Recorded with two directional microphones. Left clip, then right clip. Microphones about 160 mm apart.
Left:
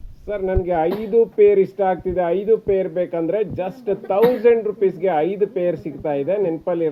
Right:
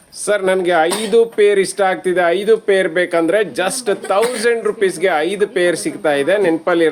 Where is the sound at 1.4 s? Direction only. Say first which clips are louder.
Right 2 dB; 75° right (ahead or behind).